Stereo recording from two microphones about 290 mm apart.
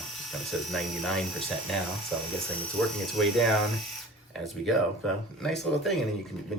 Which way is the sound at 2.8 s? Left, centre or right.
Centre.